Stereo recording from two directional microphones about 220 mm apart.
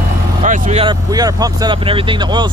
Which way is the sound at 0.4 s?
30° right (ahead or behind).